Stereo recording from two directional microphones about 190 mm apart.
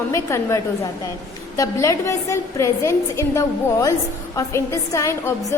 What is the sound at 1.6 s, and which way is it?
A woman's voice, 15° left (ahead or behind).